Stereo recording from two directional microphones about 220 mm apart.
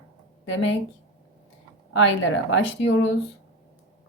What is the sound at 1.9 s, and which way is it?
Speech, 60° left (ahead or behind).